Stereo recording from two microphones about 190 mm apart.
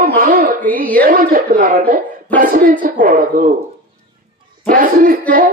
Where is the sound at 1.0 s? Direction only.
50° right (ahead or behind).